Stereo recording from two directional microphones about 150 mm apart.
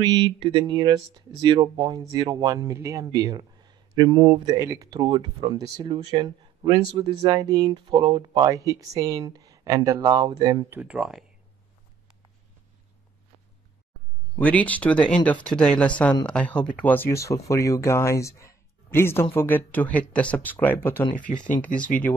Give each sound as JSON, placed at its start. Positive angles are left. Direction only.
{"t": 0.0, "sound": "speech", "side_deg": -30}
{"t": 10.8, "sound": "speech", "side_deg": -5}
{"t": 14.4, "sound": "speech", "side_deg": 10}